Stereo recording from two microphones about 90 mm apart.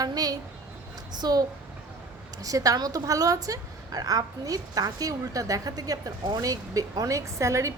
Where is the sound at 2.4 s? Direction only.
40° right (ahead or behind).